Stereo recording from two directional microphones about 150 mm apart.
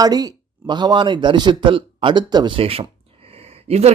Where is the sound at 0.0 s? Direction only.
25° right (ahead or behind).